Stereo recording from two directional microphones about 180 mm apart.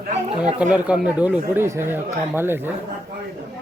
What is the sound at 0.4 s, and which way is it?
Speech, 5° right (ahead or behind).